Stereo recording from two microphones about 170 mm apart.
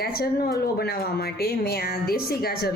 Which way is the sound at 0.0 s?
65° left (ahead or behind).